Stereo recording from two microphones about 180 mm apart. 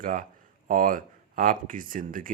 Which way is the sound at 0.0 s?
50° right (ahead or behind).